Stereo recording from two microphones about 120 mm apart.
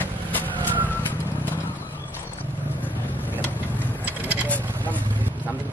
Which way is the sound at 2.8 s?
15° left (ahead or behind).